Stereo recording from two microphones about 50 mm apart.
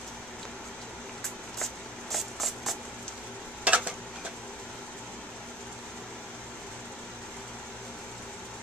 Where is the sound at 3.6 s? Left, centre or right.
Right.